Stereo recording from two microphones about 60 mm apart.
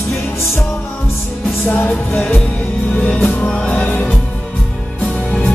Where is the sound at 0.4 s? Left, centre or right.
Left.